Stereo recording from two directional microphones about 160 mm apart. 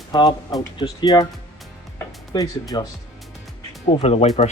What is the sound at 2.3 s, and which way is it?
Speech, 25° left (ahead or behind).